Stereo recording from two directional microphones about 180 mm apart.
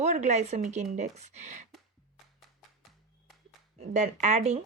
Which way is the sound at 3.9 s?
40° right (ahead or behind).